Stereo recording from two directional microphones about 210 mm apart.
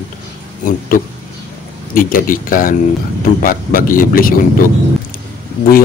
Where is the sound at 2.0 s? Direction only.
40° left (ahead or behind).